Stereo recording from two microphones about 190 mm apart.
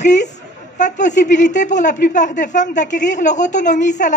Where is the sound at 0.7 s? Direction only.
40° left (ahead or behind).